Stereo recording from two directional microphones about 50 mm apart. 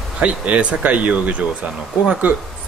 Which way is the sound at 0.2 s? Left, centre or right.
Right.